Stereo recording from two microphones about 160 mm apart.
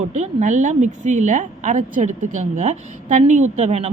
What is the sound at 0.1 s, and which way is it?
Speech, 50° right (ahead or behind).